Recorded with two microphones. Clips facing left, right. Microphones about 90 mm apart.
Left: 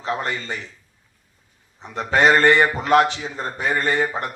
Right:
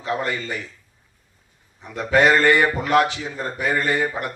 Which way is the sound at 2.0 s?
20° left (ahead or behind).